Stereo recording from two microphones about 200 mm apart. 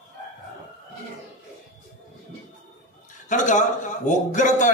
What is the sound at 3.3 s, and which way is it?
A man's voice, 40° left (ahead or behind).